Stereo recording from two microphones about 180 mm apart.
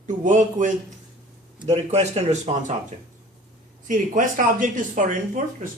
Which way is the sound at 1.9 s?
35° right (ahead or behind).